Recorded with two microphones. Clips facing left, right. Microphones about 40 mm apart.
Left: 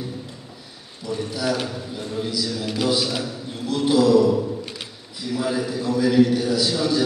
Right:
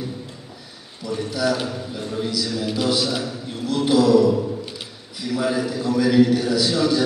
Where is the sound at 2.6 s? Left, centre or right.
Centre.